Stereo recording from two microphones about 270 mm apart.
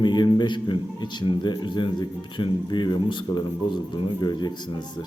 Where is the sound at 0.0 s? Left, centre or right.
Centre.